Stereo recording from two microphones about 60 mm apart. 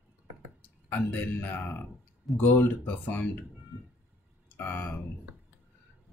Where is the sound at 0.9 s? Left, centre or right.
Left.